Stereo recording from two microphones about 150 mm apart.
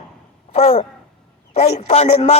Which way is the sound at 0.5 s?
40° left (ahead or behind).